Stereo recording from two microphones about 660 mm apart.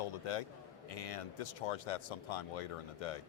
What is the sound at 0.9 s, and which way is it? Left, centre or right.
Speech, left.